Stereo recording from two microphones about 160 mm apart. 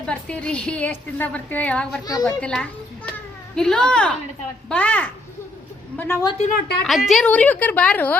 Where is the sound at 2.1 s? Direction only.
25° left (ahead or behind).